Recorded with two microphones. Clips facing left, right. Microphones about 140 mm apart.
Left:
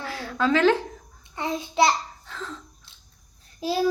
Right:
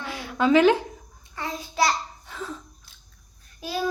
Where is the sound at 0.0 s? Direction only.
15° right (ahead or behind).